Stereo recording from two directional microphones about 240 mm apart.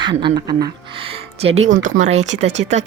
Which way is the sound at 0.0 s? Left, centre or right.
Centre.